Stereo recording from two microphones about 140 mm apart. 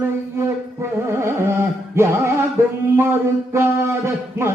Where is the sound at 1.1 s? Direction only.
20° right (ahead or behind).